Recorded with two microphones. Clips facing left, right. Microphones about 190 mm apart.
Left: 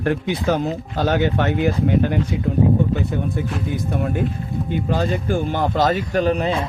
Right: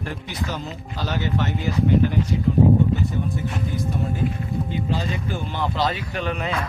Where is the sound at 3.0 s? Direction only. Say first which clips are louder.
Left 3 dB; 60° left (ahead or behind); by 6.6 s 30° left (ahead or behind).